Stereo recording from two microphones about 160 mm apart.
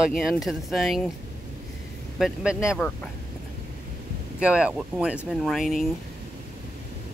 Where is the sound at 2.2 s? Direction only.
5° right (ahead or behind).